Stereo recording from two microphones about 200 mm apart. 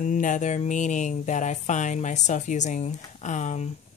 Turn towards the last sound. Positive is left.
turn(degrees=35)  # may be behind; listen again after turning